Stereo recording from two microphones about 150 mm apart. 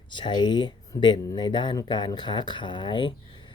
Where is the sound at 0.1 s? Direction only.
30° left (ahead or behind).